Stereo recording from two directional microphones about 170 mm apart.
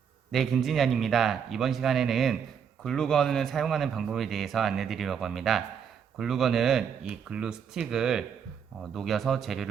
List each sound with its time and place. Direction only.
0.3 s a man's voice: centre (ahead or behind)